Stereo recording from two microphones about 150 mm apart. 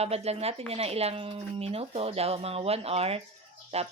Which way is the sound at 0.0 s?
45° right (ahead or behind).